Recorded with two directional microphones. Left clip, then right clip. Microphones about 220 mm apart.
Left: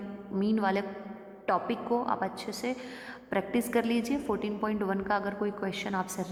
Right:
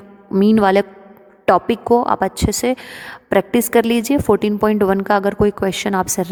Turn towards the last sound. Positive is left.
turn(degrees=-55)  # may be behind; listen again after turning